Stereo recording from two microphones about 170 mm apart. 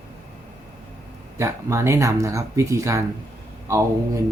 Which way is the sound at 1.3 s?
15° right (ahead or behind).